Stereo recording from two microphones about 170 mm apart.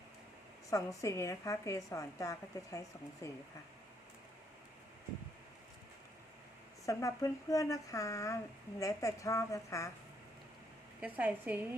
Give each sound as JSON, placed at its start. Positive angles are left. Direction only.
{"t": 0.7, "sound": "a woman's voice", "side_deg": 20}
{"t": 6.8, "sound": "a woman's voice", "side_deg": 20}
{"t": 11.0, "sound": "a woman's voice", "side_deg": -10}